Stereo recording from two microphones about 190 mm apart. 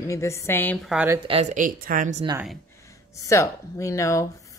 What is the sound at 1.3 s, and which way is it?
Speech, 35° right (ahead or behind).